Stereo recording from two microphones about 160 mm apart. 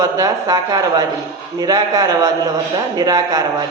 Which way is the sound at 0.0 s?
20° right (ahead or behind).